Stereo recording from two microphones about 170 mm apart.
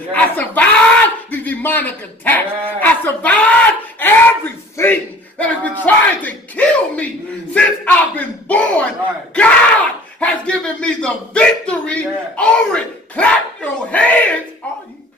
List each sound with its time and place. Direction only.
0.1 s a man's voice: 10° left (ahead or behind)